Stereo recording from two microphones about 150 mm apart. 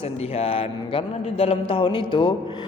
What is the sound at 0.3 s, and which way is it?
A man's voice, 40° left (ahead or behind).